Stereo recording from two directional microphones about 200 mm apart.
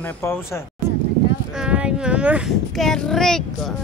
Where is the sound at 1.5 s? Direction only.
5° right (ahead or behind).